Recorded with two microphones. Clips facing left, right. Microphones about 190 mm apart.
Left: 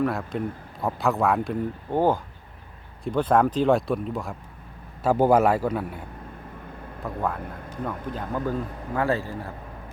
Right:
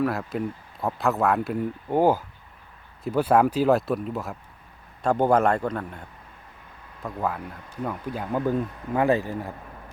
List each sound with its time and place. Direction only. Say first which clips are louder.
0.0 s a man's voice: even; centre (ahead or behind)
7.0 s speech: even; 5° right (ahead or behind)